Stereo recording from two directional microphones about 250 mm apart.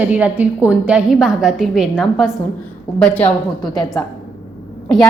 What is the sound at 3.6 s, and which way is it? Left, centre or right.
Speech, centre.